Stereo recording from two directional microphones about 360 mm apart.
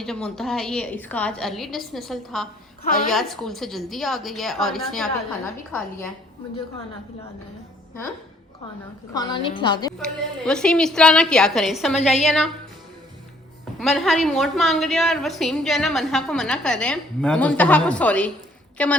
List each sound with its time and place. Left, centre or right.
0.0 s a woman's voice: centre
2.8 s a woman's voice: left
3.1 s a woman's voice: centre
9.1 s a woman's voice: centre
13.7 s a woman's voice: centre